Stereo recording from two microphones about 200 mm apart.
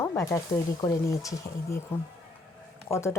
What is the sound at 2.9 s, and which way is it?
Speech, 15° left (ahead or behind).